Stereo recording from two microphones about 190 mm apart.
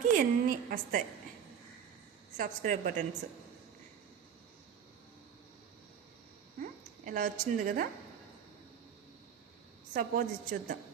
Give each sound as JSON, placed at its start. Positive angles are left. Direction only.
{"t": 0.2, "sound": "a woman's voice", "side_deg": -45}
{"t": 2.4, "sound": "a woman's voice", "side_deg": -45}
{"t": 6.6, "sound": "a woman's voice", "side_deg": -45}
{"t": 9.9, "sound": "a woman's voice", "side_deg": -45}